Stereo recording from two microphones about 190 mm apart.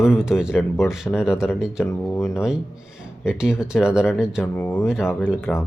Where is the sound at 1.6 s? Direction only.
Centre (ahead or behind).